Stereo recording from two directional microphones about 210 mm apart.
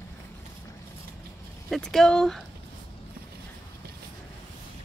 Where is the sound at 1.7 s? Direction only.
5° left (ahead or behind).